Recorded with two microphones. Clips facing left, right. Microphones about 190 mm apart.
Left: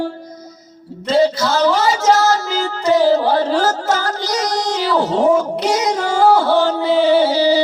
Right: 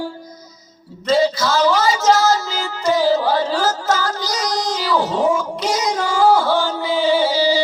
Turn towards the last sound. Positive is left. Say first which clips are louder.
# left 3 dB
turn(degrees=60)  # may be behind; listen again after turning